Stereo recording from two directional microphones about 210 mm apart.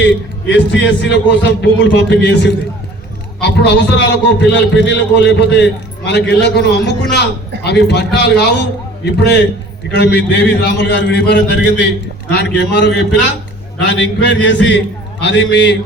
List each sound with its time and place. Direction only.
0.0 s a man's voice: 55° left (ahead or behind)